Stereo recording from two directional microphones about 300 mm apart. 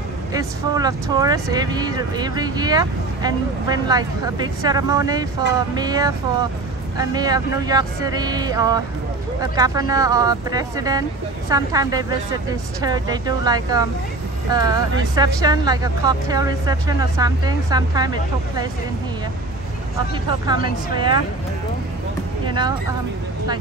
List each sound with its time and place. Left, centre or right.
0.3 s speech: centre
20.4 s speech: centre
22.5 s speech: centre